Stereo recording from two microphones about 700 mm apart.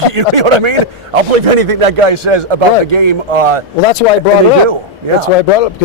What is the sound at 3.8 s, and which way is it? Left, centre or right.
Speech, left.